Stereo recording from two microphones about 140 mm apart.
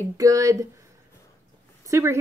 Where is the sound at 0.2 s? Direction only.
25° right (ahead or behind).